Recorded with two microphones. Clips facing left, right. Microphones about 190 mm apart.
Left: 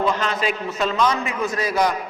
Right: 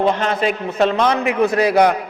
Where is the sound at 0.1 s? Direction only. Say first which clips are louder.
Right 4 dB; 55° right (ahead or behind).